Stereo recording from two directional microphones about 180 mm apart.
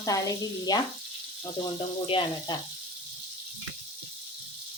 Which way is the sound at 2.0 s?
30° left (ahead or behind).